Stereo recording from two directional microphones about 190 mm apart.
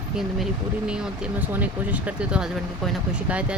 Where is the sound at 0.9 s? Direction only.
5° right (ahead or behind).